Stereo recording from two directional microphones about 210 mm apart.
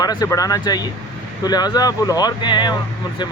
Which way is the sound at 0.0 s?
20° left (ahead or behind).